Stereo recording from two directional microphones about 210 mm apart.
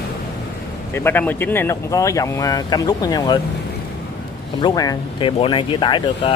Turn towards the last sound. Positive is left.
turn(degrees=25)  # may be behind; listen again after turning